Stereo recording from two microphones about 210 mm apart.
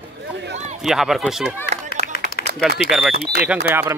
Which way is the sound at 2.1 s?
45° left (ahead or behind).